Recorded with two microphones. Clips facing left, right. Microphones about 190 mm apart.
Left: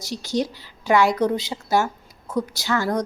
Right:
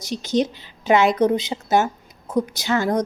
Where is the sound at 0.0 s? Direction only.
20° right (ahead or behind).